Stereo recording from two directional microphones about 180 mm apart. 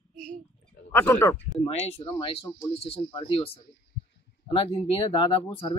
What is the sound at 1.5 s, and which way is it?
Speech, 35° left (ahead or behind).